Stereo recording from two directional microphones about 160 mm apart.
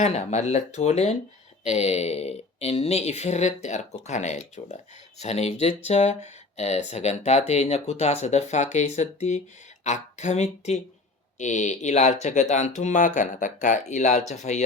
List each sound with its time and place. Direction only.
0.0 s speech: 45° left (ahead or behind)